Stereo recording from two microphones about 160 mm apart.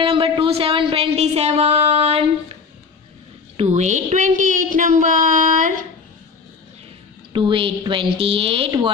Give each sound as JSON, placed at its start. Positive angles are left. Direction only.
{"t": 0.0, "sound": "speech", "side_deg": -35}
{"t": 3.5, "sound": "a woman's voice", "side_deg": -45}
{"t": 7.3, "sound": "a woman's voice", "side_deg": -30}